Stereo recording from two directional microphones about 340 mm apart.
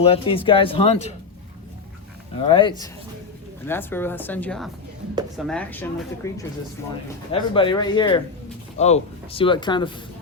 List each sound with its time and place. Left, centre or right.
0.0 s speech: centre
2.5 s speech: centre